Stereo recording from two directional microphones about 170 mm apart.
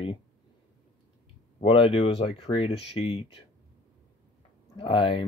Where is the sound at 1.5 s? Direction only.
30° left (ahead or behind).